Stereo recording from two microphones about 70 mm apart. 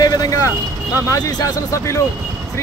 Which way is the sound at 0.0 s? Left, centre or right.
Left.